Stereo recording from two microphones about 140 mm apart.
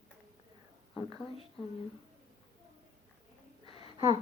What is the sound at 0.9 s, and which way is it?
Speech, 40° left (ahead or behind).